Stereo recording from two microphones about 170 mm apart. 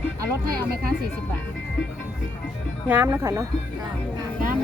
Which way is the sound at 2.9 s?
15° right (ahead or behind).